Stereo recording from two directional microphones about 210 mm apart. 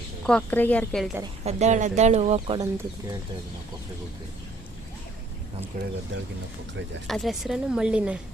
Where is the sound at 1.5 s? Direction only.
35° right (ahead or behind).